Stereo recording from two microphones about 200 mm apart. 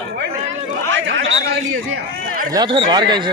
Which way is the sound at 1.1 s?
70° right (ahead or behind).